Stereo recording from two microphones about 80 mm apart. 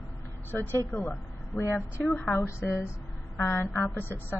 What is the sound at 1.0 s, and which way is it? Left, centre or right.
Speech, left.